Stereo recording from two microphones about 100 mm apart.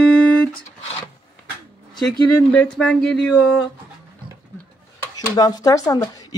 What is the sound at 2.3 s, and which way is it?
Speech, 15° left (ahead or behind).